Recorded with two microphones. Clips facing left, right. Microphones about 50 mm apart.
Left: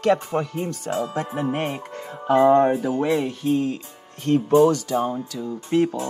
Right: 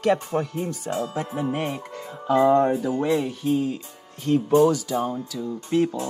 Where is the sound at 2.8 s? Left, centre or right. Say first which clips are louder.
Left 1 dB; centre.